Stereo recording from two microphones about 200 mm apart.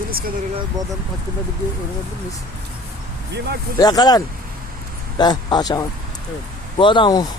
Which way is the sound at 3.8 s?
20° left (ahead or behind).